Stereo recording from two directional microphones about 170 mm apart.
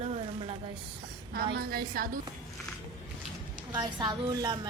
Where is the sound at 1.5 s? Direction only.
65° right (ahead or behind).